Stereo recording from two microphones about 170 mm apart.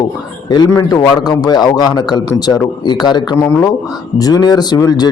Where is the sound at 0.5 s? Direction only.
20° left (ahead or behind).